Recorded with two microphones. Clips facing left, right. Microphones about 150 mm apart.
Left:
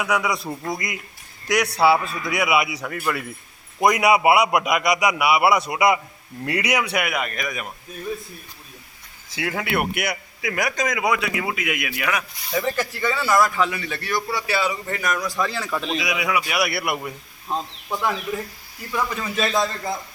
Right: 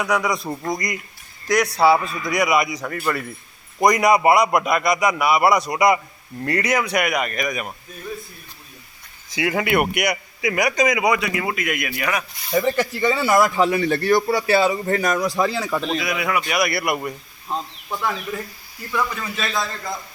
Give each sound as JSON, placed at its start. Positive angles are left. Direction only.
{"t": 0.0, "sound": "a man's voice", "side_deg": 5}
{"t": 0.4, "sound": "a man's voice", "side_deg": -15}
{"t": 0.7, "sound": "a man's voice", "side_deg": 5}
{"t": 9.3, "sound": "a man's voice", "side_deg": 0}
{"t": 12.7, "sound": "a man's voice", "side_deg": -20}
{"t": 13.6, "sound": "a man's voice", "side_deg": -40}
{"t": 14.6, "sound": "speech", "side_deg": -35}
{"t": 15.2, "sound": "a man's voice", "side_deg": -25}
{"t": 15.6, "sound": "a man's voice", "side_deg": 0}
{"t": 16.0, "sound": "a man's voice", "side_deg": 10}
{"t": 18.9, "sound": "a man's voice", "side_deg": 20}